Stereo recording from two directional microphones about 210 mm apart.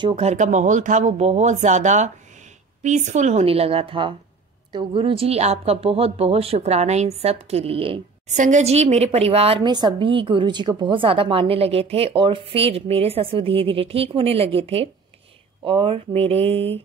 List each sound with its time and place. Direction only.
0.0 s a woman's voice: 30° right (ahead or behind)